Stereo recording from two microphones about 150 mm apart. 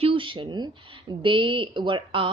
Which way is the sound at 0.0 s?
35° right (ahead or behind).